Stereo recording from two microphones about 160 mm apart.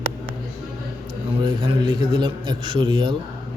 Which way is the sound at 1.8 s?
30° right (ahead or behind).